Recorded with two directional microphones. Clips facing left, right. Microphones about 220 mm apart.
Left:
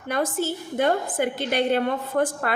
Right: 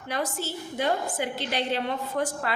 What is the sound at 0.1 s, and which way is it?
A woman's voice, 50° left (ahead or behind).